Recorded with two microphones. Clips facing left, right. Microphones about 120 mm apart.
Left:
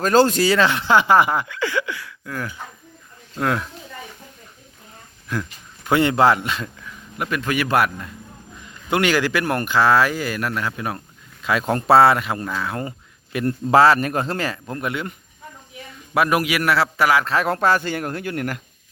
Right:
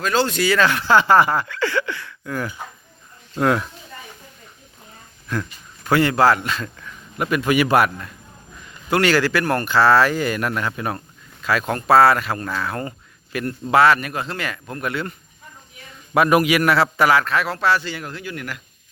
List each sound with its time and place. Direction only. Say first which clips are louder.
0.0 s a man's voice: left 4 dB; 40° left (ahead or behind); by 3.6 s centre (ahead or behind)
5.3 s a sound: right 1 dB; 5° left (ahead or behind)
5.9 s speech: even; 20° left (ahead or behind)
6.7 s a sound: right 3 dB; 5° left (ahead or behind)
7.3 s a man's voice: right 4 dB; 5° right (ahead or behind)
8.9 s speech: right 1 dB; 15° left (ahead or behind)
11.4 s speech: left 1 dB; 25° left (ahead or behind)
13.4 s speech: left 1 dB; 35° left (ahead or behind); by 15.1 s 20° left (ahead or behind)
16.1 s a man's voice: right 3 dB; centre (ahead or behind)
17.2 s speech: left 1 dB; 35° left (ahead or behind)
17.5 s speech: left 2 dB; 45° left (ahead or behind)